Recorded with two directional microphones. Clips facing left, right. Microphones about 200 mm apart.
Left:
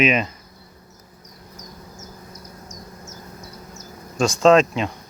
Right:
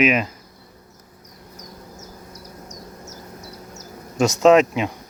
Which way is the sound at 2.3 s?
70° right (ahead or behind).